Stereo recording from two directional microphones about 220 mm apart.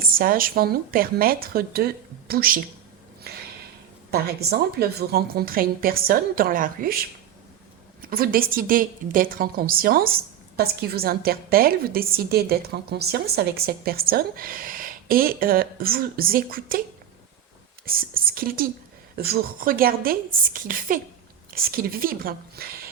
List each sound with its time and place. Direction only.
0.0 s speech: 40° right (ahead or behind)
3.3 s a sound: 45° right (ahead or behind)
4.1 s a woman's voice: 45° right (ahead or behind)
8.0 s a woman's voice: 40° right (ahead or behind)
17.8 s speech: 40° right (ahead or behind)